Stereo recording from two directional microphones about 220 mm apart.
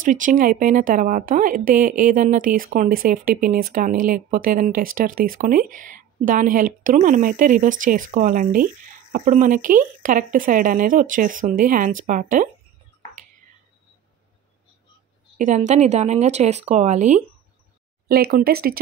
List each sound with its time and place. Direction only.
0.0 s speech: 35° right (ahead or behind)
15.3 s speech: 35° right (ahead or behind)
18.0 s speech: 45° right (ahead or behind)